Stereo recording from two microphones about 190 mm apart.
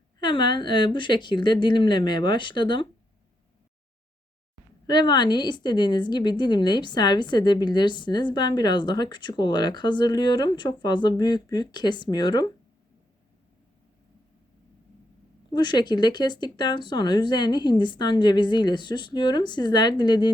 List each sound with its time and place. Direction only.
0.2 s a woman's voice: 25° left (ahead or behind)
4.9 s a woman's voice: 25° left (ahead or behind)
15.5 s a woman's voice: 25° left (ahead or behind)